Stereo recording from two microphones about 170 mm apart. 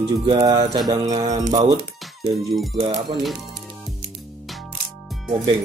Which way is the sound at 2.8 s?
30° right (ahead or behind).